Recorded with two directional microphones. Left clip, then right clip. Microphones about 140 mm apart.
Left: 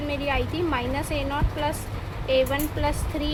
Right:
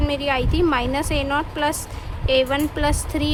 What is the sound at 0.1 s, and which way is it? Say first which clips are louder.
Speech: right 4 dB; 40° right (ahead or behind).